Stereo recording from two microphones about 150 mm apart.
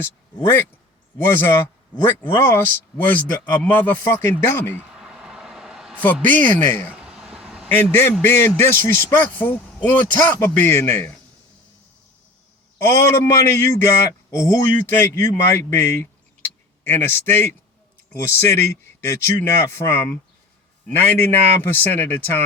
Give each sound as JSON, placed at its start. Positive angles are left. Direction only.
{"t": 0.0, "sound": "a man's voice", "side_deg": 15}
{"t": 4.8, "sound": "a sound", "side_deg": -5}
{"t": 6.2, "sound": "a man's voice", "side_deg": 10}
{"t": 6.9, "sound": "vehicle", "side_deg": -5}
{"t": 7.7, "sound": "a man's voice", "side_deg": 15}
{"t": 12.8, "sound": "a man's voice", "side_deg": 20}